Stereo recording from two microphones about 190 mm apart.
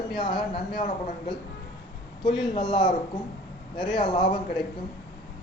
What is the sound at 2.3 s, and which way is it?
Speech, 25° left (ahead or behind).